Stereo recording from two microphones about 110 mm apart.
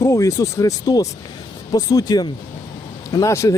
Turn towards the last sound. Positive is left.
turn(degrees=30)  # may be behind; listen again after turning